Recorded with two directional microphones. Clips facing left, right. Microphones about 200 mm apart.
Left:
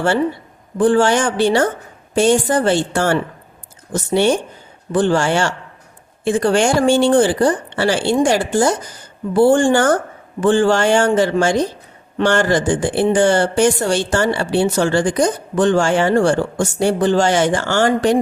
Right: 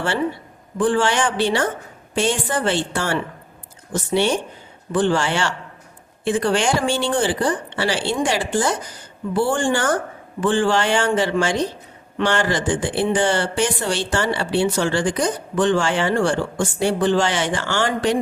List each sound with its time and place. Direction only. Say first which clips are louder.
0.8 s speech: left 5 dB; 40° left (ahead or behind)